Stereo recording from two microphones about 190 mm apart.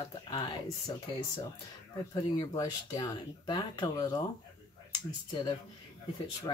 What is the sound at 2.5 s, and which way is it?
Speech, 20° left (ahead or behind).